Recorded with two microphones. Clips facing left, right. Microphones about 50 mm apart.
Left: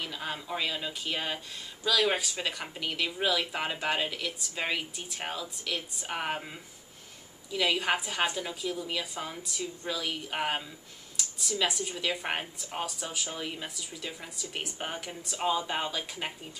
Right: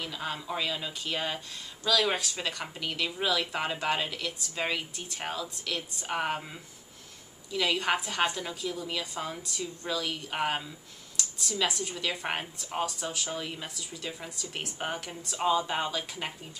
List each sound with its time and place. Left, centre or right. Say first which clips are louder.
0.0 s a woman's voice: right 1 dB; centre
7.5 s a woman's voice: even; centre